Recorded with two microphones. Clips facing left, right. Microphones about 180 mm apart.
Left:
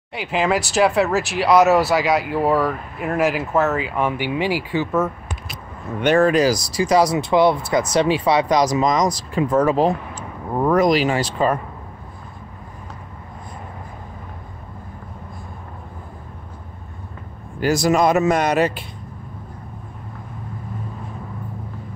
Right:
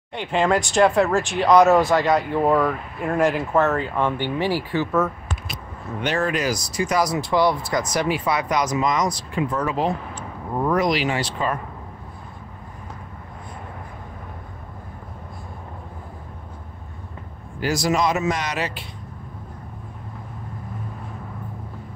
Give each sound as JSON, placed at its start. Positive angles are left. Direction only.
{"t": 0.1, "sound": "speech", "side_deg": 5}
{"t": 5.9, "sound": "speech", "side_deg": 55}
{"t": 6.2, "sound": "a man's voice", "side_deg": 35}
{"t": 17.6, "sound": "a man's voice", "side_deg": 50}